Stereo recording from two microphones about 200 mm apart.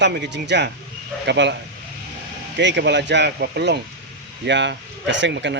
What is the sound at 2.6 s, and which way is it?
Speech, 60° right (ahead or behind).